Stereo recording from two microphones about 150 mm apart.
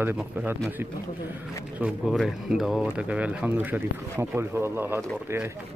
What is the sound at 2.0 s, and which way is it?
Speech, centre (ahead or behind).